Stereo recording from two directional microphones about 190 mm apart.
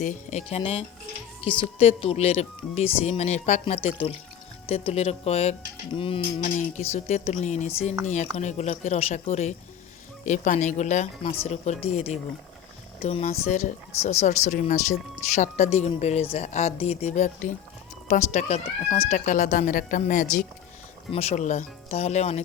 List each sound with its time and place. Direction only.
0.0 s speech: 35° left (ahead or behind)